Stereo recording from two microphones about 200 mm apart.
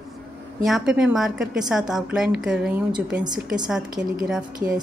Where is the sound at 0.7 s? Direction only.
Centre (ahead or behind).